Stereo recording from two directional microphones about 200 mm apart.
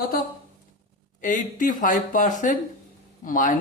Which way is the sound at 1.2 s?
40° left (ahead or behind).